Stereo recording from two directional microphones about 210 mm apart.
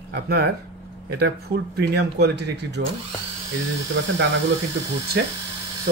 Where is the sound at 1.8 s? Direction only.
50° right (ahead or behind).